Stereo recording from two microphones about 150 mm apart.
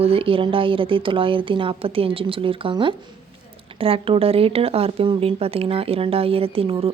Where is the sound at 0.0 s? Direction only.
40° right (ahead or behind).